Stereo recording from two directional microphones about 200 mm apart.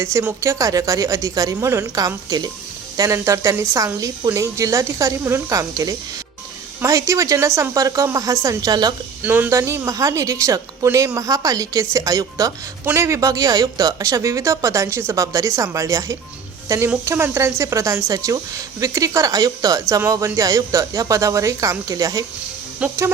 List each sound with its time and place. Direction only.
0.0 s a woman's voice: 15° right (ahead or behind)